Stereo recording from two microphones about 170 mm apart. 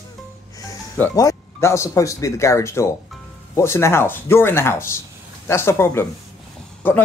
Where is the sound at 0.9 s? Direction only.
15° left (ahead or behind).